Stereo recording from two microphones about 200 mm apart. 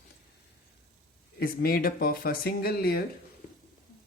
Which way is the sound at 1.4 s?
45° left (ahead or behind).